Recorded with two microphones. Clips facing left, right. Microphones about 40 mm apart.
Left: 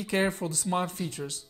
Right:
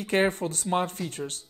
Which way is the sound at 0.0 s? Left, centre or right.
Right.